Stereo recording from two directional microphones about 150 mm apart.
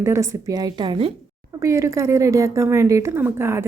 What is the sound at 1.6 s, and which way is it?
A woman's voice, 20° right (ahead or behind).